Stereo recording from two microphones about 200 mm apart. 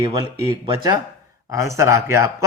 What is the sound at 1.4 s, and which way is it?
Speech, 15° right (ahead or behind).